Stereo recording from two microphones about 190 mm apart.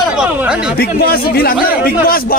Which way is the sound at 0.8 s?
55° left (ahead or behind).